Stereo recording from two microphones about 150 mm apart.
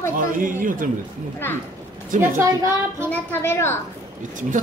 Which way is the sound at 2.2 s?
15° right (ahead or behind).